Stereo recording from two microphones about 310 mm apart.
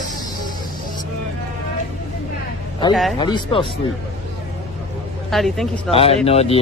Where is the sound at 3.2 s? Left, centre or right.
Centre.